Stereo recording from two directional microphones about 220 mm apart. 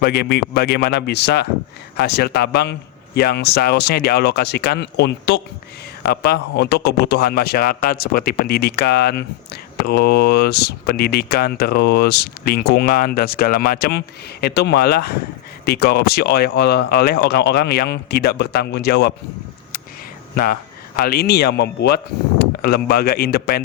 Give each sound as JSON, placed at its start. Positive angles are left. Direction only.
{"t": 0.0, "sound": "speech", "side_deg": 45}
{"t": 20.3, "sound": "speech", "side_deg": 40}